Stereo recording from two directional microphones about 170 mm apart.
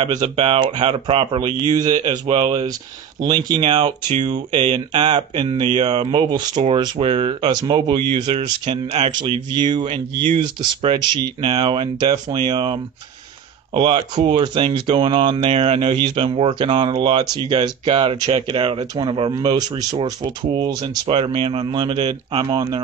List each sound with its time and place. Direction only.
0.0 s speech: 35° right (ahead or behind)